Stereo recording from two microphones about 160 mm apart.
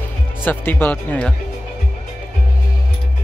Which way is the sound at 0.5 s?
10° left (ahead or behind).